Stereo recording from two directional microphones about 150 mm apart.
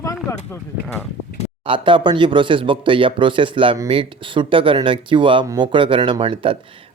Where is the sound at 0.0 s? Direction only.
20° left (ahead or behind).